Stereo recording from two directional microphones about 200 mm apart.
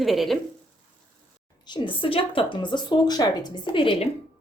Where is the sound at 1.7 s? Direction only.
25° left (ahead or behind).